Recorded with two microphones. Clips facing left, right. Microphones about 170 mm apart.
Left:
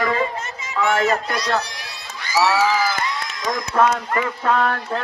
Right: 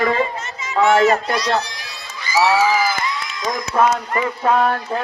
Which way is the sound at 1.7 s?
65° left (ahead or behind).